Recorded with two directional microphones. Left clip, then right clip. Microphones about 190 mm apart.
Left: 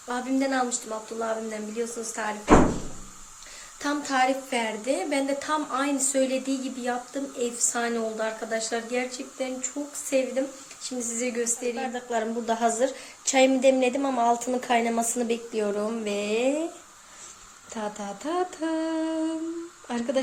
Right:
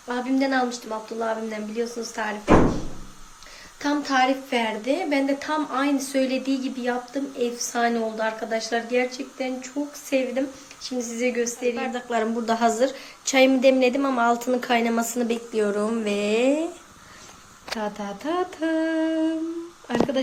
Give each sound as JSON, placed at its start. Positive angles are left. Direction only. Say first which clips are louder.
{"t": 0.1, "sound": "a woman's voice", "louder": "right 3 dB", "side_deg": 10}
{"t": 3.8, "sound": "a woman's voice", "louder": "right 3 dB", "side_deg": 10}
{"t": 15.3, "sound": "a woman's voice", "louder": "right 3 dB", "side_deg": 20}
{"t": 17.7, "sound": "a woman's voice", "louder": "right 2 dB", "side_deg": 15}